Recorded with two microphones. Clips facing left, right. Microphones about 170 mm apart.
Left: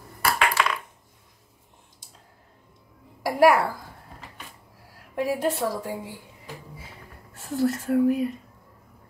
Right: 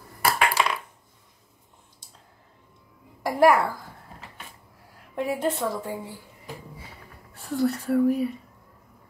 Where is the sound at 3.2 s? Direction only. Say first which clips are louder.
Even; 10° left (ahead or behind).